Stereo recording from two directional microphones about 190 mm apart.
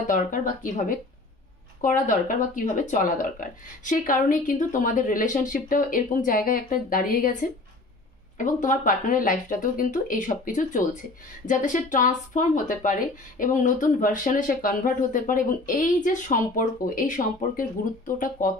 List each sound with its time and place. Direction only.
0.0 s speech: 45° left (ahead or behind)